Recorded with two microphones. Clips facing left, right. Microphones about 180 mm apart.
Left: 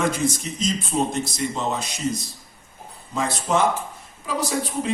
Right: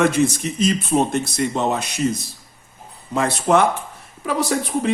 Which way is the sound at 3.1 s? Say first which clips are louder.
Right 5 dB; 65° right (ahead or behind).